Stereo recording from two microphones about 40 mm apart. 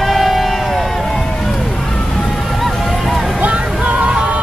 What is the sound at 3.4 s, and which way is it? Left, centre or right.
Music, right.